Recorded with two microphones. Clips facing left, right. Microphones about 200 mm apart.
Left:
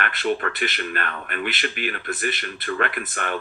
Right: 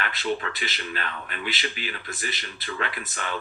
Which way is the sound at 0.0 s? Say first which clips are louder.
Left 4 dB; 55° left (ahead or behind).